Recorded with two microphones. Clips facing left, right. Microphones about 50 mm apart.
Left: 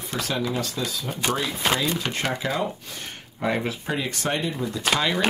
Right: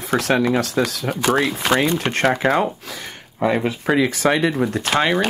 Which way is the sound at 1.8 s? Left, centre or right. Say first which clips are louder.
Right 7 dB; right.